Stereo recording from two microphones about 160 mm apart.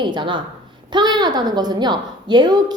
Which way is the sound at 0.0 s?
30° right (ahead or behind).